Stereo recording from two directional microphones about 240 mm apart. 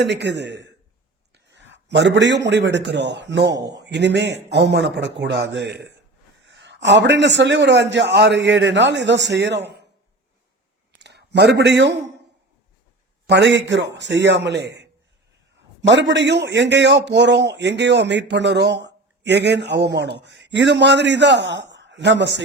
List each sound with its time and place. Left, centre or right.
0.0 s a man's voice: right
11.0 s a man's voice: right
13.2 s a man's voice: right
15.9 s a man's voice: right